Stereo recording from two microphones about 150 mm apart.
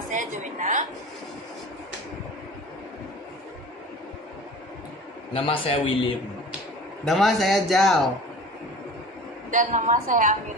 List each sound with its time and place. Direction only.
0.1 s a sound: 60° right (ahead or behind)
5.3 s speech: 35° left (ahead or behind)
7.0 s a man's voice: centre (ahead or behind)
9.5 s a woman's voice: 55° right (ahead or behind)